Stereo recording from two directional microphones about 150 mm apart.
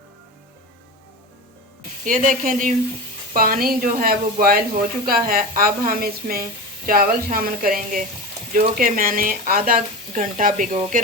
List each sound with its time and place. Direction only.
2.0 s a woman's voice: 65° right (ahead or behind)
10.2 s speech: 60° right (ahead or behind)